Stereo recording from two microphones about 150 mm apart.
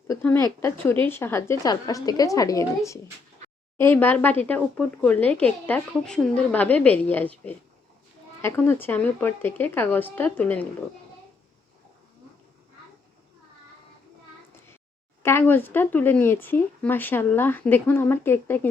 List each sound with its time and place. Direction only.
0.1 s a woman's voice: 15° left (ahead or behind)
15.2 s speech: 15° left (ahead or behind)